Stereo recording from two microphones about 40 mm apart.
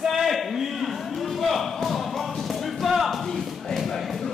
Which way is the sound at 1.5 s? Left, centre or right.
Centre.